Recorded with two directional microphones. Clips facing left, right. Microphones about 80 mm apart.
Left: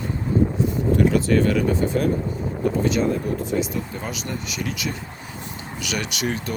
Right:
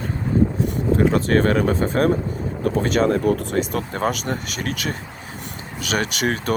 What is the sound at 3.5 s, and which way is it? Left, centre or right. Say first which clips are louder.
Speech: right 2 dB; right.